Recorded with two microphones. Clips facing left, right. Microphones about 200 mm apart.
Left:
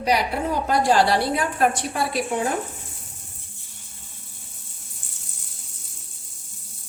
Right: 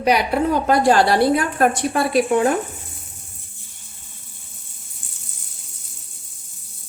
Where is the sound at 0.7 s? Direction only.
55° right (ahead or behind).